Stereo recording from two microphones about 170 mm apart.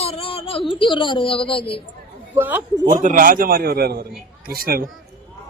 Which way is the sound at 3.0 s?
50° right (ahead or behind).